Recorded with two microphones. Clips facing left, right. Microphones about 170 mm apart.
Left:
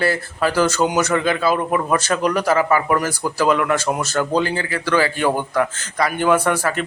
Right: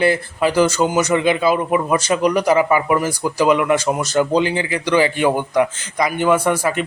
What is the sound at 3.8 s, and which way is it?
Speech, 5° left (ahead or behind).